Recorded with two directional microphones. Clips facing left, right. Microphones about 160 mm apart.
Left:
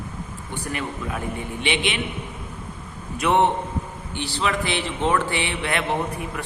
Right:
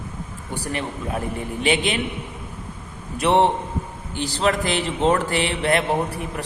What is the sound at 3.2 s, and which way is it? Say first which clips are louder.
A man's voice: right 2 dB; 30° right (ahead or behind).